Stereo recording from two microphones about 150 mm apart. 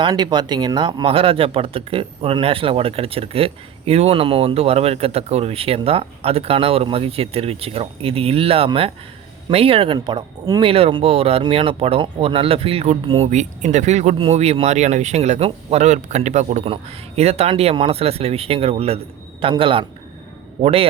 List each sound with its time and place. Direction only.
0.0 s speech: 30° right (ahead or behind)
10.6 s speech: 40° right (ahead or behind)